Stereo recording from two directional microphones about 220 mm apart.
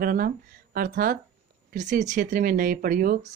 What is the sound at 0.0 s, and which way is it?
Speech, 40° right (ahead or behind).